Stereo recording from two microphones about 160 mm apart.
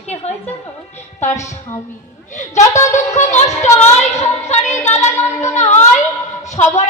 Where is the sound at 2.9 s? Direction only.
45° left (ahead or behind).